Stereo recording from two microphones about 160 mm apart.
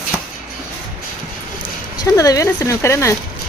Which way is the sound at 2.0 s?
20° left (ahead or behind).